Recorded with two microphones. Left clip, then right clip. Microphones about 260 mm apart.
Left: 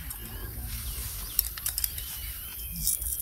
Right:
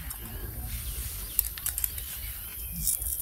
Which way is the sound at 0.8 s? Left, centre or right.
Centre.